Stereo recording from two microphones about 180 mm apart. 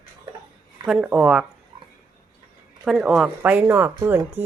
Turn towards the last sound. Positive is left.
turn(degrees=-15)  # may be behind; listen again after turning